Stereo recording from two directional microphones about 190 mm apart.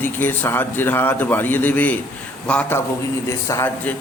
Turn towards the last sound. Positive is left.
turn(degrees=15)  # may be behind; listen again after turning